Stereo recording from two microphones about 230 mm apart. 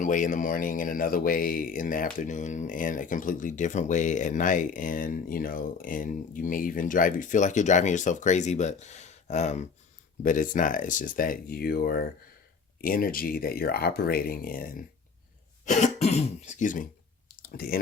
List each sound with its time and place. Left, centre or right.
0.0 s speech: left
15.6 s throat clearing: left
17.4 s a sound: left